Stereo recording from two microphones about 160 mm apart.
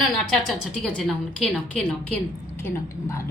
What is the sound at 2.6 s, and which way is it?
Speech, 20° left (ahead or behind).